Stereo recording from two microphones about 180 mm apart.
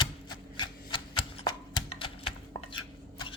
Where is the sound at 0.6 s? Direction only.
25° left (ahead or behind).